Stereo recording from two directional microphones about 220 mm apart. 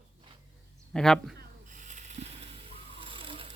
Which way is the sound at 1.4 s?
35° right (ahead or behind).